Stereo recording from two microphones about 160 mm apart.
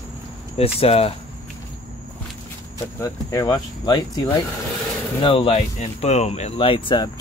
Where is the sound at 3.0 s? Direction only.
20° left (ahead or behind).